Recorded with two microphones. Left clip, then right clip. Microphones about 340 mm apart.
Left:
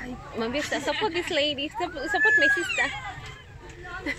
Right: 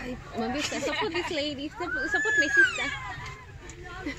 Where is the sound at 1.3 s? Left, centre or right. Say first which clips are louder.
Left 5 dB; left.